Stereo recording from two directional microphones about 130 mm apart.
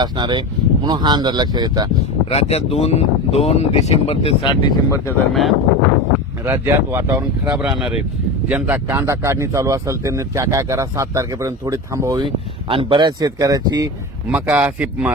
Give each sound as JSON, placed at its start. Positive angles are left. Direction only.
{"t": 0.0, "sound": "speech", "side_deg": -35}
{"t": 2.3, "sound": "speech", "side_deg": 55}
{"t": 4.4, "sound": "speech", "side_deg": 35}
{"t": 5.3, "sound": "speech", "side_deg": 0}
{"t": 6.4, "sound": "speech", "side_deg": -20}
{"t": 7.4, "sound": "speech", "side_deg": -5}
{"t": 12.2, "sound": "speech", "side_deg": -40}
{"t": 14.3, "sound": "speech", "side_deg": -15}